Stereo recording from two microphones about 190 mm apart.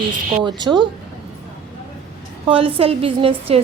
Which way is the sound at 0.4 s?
25° right (ahead or behind).